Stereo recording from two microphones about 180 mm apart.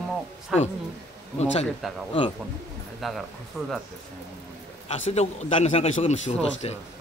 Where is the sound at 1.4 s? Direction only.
35° left (ahead or behind).